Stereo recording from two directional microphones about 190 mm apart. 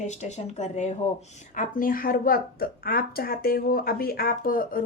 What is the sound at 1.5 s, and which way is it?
A woman's voice, 50° left (ahead or behind).